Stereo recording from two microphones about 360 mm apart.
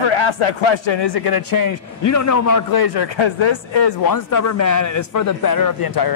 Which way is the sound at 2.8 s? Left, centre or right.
Left.